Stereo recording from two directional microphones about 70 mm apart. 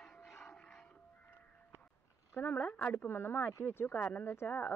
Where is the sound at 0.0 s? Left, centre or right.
Centre.